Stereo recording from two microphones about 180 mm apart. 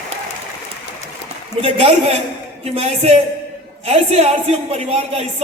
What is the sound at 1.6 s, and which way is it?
A woman's voice, 35° right (ahead or behind).